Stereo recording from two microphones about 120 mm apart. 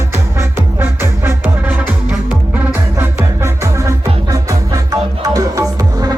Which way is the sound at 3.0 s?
20° right (ahead or behind).